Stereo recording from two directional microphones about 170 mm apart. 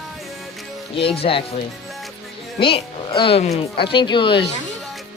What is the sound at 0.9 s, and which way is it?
Speech, 35° left (ahead or behind).